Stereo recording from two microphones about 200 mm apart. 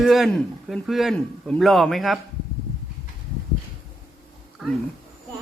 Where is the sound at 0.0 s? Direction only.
Centre (ahead or behind).